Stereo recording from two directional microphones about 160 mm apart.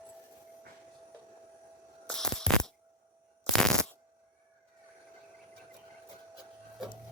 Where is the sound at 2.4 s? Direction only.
5° left (ahead or behind).